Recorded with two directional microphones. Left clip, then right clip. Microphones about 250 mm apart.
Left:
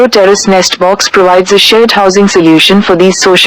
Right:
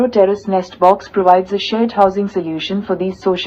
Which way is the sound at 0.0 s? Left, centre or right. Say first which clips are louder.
Left 8 dB; left.